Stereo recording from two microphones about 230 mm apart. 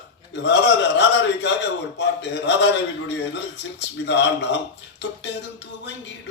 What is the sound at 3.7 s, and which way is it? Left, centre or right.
Speech, left.